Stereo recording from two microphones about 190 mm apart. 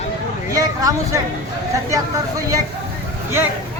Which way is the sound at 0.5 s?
20° right (ahead or behind).